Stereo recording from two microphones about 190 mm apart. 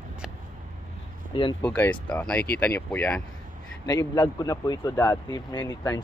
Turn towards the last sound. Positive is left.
turn(degrees=20)  # may be behind; listen again after turning